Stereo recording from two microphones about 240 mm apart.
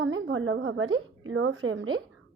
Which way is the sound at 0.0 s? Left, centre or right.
Right.